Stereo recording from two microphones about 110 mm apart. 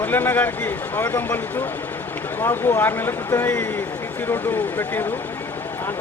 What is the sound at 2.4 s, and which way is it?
Speech, 20° left (ahead or behind).